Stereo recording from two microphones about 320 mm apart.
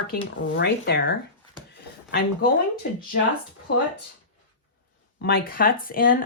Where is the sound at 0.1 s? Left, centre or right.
Left.